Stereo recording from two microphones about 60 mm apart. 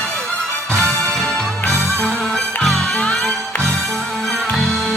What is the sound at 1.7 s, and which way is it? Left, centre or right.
Music, right.